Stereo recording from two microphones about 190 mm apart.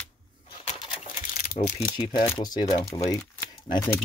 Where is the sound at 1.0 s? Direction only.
45° left (ahead or behind).